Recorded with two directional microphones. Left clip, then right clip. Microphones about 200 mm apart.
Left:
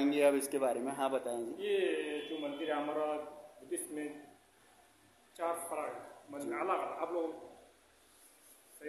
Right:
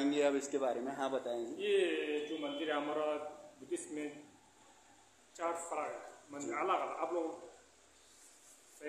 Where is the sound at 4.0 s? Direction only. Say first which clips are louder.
Left 2 dB; 15° right (ahead or behind).